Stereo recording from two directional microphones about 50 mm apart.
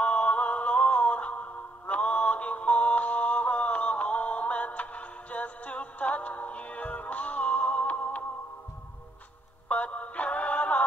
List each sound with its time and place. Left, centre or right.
0.0 s music: left
9.7 s music: left